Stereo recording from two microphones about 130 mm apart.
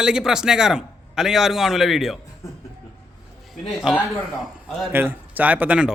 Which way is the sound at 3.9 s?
5° right (ahead or behind).